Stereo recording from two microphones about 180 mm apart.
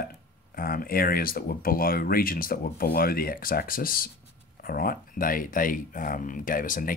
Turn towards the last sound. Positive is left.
turn(degrees=50)  # may be behind; listen again after turning